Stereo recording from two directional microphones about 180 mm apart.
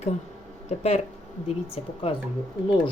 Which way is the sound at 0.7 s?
40° left (ahead or behind).